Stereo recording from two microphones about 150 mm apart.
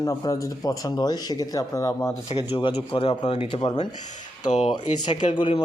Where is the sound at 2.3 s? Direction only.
40° left (ahead or behind).